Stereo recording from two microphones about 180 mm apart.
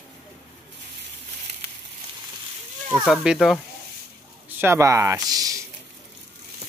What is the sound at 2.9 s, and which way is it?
Speech, 5° right (ahead or behind).